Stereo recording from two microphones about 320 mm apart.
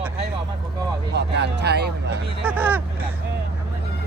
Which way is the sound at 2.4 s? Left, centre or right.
Centre.